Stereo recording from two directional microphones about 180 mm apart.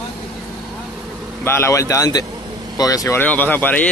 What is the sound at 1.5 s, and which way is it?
Speech, 15° left (ahead or behind).